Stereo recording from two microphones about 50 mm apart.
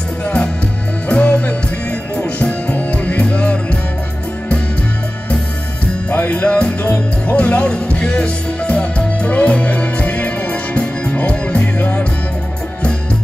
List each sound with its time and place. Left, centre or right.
1.0 s music: left
6.0 s music: left